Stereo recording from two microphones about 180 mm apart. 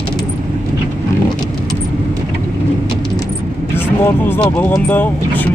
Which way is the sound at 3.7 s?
10° left (ahead or behind).